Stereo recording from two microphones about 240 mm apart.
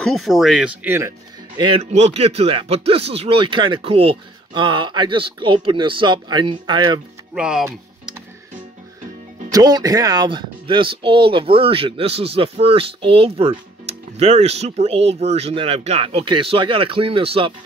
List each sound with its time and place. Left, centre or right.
0.0 s speech: centre
1.6 s speech: right
7.3 s speech: centre
9.5 s speech: centre